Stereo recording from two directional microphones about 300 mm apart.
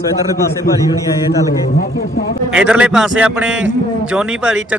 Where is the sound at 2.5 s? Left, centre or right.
Centre.